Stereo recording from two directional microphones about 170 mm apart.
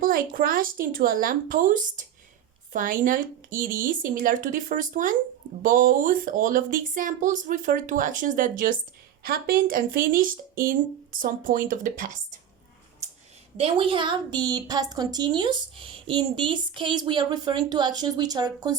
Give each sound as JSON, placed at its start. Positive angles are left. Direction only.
{"t": 0.0, "sound": "a woman's voice", "side_deg": -55}
{"t": 13.6, "sound": "a woman's voice", "side_deg": -30}